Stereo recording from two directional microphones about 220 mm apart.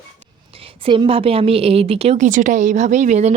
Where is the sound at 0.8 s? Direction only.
25° right (ahead or behind).